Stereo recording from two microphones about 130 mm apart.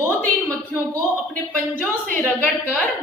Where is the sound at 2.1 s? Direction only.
15° left (ahead or behind).